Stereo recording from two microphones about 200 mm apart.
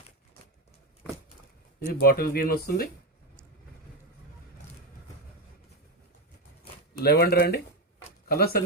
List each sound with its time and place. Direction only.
1.9 s speech: 50° left (ahead or behind)
7.0 s speech: 50° left (ahead or behind)